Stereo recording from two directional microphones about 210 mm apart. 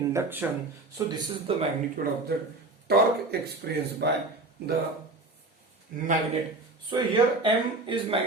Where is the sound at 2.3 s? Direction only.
50° right (ahead or behind).